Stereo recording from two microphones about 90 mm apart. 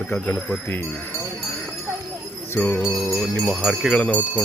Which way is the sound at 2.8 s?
5° right (ahead or behind).